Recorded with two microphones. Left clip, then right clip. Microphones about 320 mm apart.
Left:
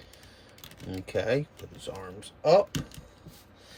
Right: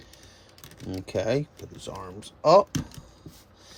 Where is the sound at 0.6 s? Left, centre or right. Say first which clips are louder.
Right 3 dB; centre.